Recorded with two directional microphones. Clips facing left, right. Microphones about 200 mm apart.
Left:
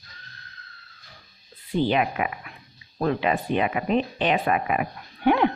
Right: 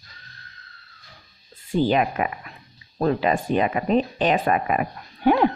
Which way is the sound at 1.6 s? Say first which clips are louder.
Right 2 dB; 45° right (ahead or behind).